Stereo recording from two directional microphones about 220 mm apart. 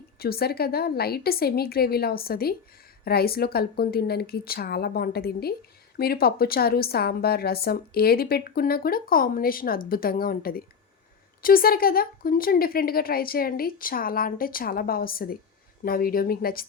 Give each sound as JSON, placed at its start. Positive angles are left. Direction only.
{"t": 0.2, "sound": "a woman's voice", "side_deg": 45}